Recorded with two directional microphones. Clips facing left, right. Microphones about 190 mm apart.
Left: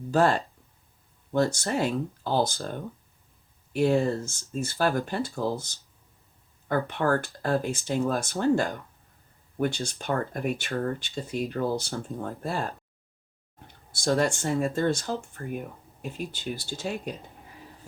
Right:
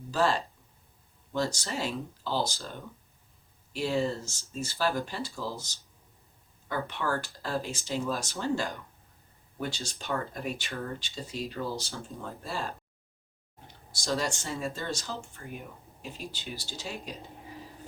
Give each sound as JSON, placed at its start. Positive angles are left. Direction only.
{"t": 0.1, "sound": "speech", "side_deg": 55}
{"t": 13.9, "sound": "speech", "side_deg": 55}